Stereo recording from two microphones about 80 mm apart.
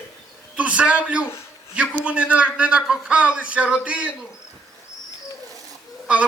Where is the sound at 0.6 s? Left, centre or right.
Centre.